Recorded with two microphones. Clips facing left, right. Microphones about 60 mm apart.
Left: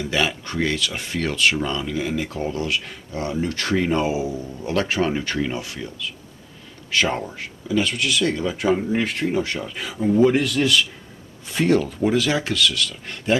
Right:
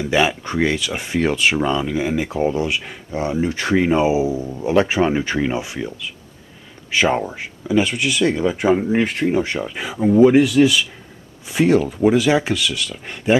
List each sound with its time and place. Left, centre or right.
0.1 s speech: centre